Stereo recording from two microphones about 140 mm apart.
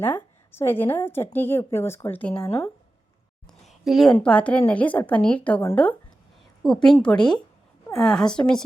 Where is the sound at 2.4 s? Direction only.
20° left (ahead or behind).